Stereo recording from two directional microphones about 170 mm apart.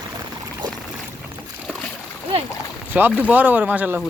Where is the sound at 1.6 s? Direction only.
Centre (ahead or behind).